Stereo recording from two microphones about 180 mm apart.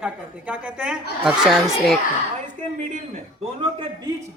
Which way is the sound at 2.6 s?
45° right (ahead or behind).